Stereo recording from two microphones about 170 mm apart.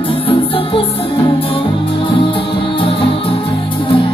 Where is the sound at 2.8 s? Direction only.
30° left (ahead or behind).